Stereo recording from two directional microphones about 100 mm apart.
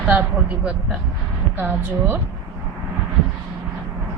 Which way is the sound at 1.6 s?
20° right (ahead or behind).